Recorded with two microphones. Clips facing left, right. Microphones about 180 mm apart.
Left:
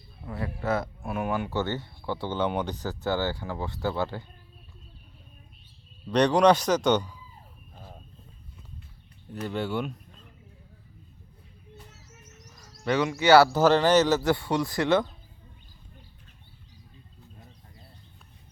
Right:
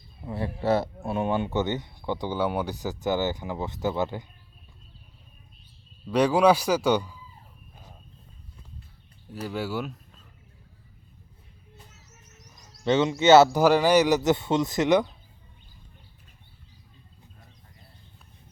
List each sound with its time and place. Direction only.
0.3 s speech: 30° right (ahead or behind)
6.1 s speech: 5° right (ahead or behind)
9.3 s speech: 5° right (ahead or behind)
12.5 s speech: 25° right (ahead or behind)
13.6 s speech: 10° right (ahead or behind)